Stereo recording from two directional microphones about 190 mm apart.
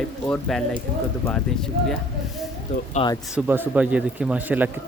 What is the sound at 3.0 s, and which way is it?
Speech, 30° left (ahead or behind).